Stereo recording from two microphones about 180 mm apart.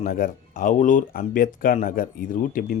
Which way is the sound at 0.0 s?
50° left (ahead or behind).